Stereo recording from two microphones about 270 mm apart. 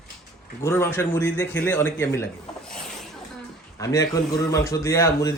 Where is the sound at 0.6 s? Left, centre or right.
Centre.